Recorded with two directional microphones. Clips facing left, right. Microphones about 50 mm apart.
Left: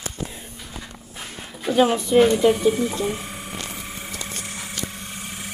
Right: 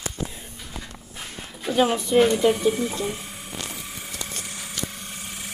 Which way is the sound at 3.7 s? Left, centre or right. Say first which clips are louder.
Left 2 dB; left.